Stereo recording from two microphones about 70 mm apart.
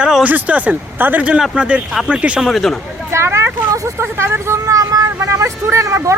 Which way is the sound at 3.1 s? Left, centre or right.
Right.